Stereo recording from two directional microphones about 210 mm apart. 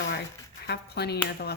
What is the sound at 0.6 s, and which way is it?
Speech, 50° left (ahead or behind).